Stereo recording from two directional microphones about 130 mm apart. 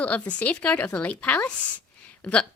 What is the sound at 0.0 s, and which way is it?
A woman's voice, 10° left (ahead or behind).